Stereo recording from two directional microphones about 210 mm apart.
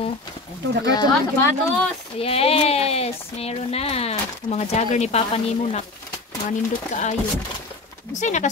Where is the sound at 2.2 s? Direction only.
30° left (ahead or behind).